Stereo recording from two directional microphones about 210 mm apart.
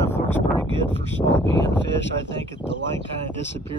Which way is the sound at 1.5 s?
60° left (ahead or behind).